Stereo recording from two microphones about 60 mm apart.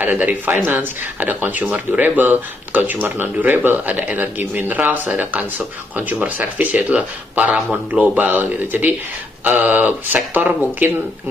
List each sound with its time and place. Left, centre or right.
0.0 s speech: right